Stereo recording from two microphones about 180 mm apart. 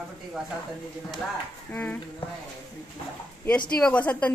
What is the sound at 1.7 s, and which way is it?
Speech, 10° left (ahead or behind).